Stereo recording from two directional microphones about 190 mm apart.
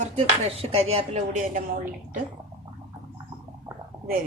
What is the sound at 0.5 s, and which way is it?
A woman's voice, 30° right (ahead or behind).